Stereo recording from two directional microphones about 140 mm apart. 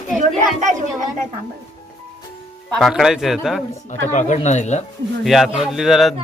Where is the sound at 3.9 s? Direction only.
60° left (ahead or behind).